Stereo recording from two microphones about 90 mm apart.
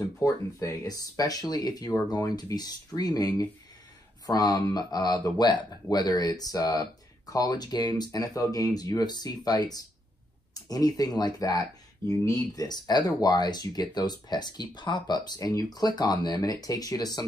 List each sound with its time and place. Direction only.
0.0 s speech: 40° left (ahead or behind)
12.6 s speech: 50° left (ahead or behind)